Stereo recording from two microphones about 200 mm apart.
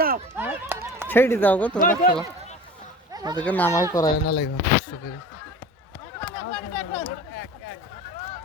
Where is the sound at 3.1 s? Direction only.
20° right (ahead or behind).